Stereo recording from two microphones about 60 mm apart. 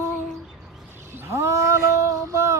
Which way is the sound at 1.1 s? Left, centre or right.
Right.